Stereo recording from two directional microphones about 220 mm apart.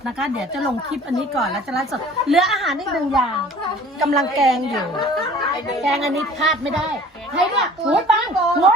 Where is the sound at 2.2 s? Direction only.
Centre (ahead or behind).